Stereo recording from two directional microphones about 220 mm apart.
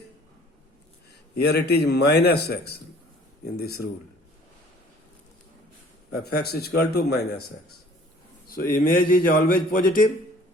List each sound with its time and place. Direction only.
1.4 s a man's voice: 50° left (ahead or behind)
6.1 s a man's voice: 45° left (ahead or behind)
8.4 s a man's voice: 40° left (ahead or behind)